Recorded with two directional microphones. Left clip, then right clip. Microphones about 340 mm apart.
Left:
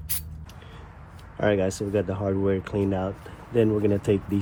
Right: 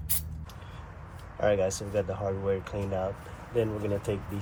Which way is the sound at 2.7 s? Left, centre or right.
Left.